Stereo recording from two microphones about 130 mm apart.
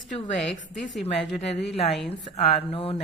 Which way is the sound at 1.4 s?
55° left (ahead or behind).